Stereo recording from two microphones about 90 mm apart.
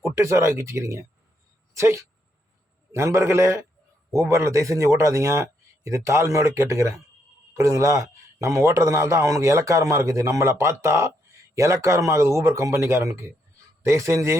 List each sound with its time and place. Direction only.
0.0 s a man's voice: 30° right (ahead or behind)